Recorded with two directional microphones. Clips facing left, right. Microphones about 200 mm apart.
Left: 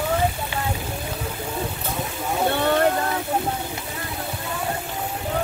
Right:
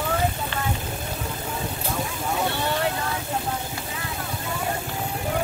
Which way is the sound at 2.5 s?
55° left (ahead or behind).